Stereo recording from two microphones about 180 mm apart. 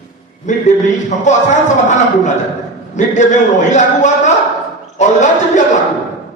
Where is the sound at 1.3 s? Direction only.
40° left (ahead or behind).